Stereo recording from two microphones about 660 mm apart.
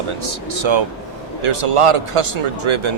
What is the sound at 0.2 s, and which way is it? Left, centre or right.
Speech, right.